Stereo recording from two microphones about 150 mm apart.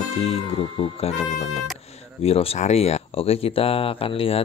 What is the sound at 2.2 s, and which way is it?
Speech, 40° left (ahead or behind).